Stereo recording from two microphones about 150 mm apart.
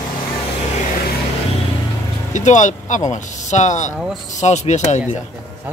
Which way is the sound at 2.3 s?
55° left (ahead or behind).